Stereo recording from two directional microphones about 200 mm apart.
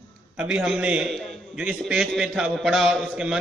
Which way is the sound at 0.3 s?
5° right (ahead or behind).